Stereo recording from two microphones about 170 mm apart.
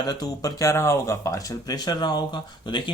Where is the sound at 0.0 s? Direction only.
25° left (ahead or behind).